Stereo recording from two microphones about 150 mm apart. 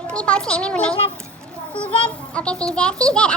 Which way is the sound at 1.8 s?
35° left (ahead or behind).